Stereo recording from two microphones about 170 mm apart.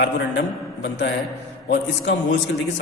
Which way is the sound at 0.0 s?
90° left.